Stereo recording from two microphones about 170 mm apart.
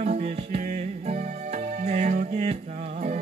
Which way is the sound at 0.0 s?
40° right (ahead or behind).